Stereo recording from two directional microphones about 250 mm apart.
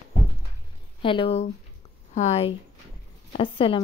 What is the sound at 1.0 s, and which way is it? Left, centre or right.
Speech, left.